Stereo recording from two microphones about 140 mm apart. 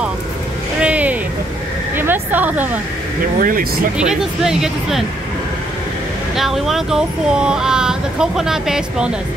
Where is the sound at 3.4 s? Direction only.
85° right.